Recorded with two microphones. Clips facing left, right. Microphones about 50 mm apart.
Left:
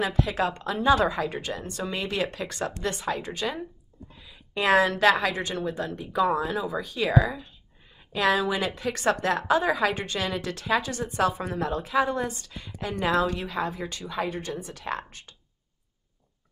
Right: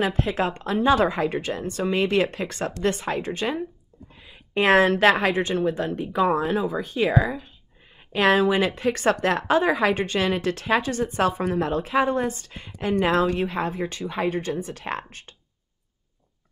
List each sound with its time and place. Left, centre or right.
0.0 s a woman's voice: right
4.2 s a sound: right
5.2 s a woman's voice: right
8.0 s a woman's voice: right
11.6 s a woman's voice: right